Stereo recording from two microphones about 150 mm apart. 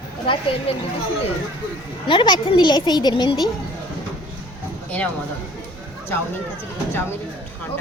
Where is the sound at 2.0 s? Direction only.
35° left (ahead or behind).